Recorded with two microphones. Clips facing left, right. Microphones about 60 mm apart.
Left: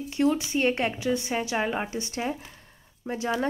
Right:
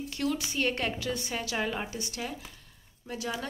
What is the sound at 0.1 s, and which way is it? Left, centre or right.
Speech, left.